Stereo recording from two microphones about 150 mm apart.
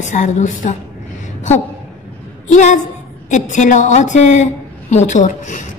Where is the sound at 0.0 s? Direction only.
55° left (ahead or behind).